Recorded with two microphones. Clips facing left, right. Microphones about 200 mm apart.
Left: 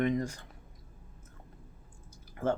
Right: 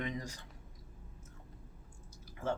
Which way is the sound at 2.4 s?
55° left (ahead or behind).